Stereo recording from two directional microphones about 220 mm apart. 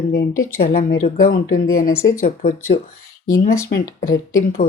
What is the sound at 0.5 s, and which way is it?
Speech, 40° left (ahead or behind).